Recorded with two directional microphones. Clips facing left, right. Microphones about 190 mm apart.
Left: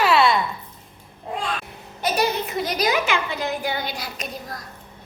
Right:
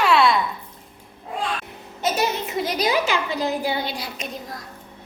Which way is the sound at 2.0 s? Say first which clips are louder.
Left 1 dB; 25° right (ahead or behind).